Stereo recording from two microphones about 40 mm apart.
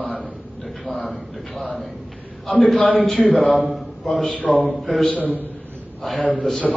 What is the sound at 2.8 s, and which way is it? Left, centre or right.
Speech, left.